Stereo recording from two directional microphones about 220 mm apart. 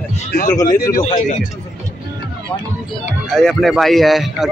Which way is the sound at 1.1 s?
35° left (ahead or behind).